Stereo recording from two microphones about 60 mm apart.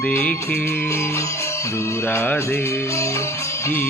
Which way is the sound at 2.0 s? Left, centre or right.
Left.